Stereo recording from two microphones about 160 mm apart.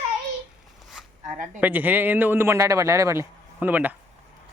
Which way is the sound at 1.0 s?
5° right (ahead or behind).